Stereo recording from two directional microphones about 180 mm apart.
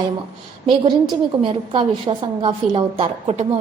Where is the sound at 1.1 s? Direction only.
25° right (ahead or behind).